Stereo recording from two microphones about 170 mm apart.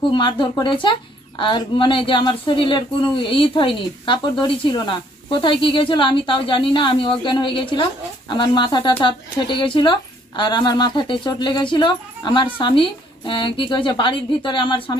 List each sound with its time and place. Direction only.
0.1 s speech: 25° left (ahead or behind)